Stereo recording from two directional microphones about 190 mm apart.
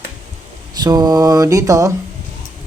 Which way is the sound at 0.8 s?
20° right (ahead or behind).